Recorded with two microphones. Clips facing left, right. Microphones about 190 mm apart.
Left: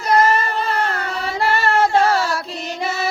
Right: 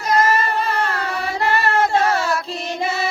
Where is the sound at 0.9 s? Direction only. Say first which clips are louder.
Even; 30° left (ahead or behind).